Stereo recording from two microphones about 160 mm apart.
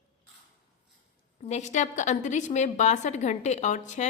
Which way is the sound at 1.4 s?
45° left (ahead or behind).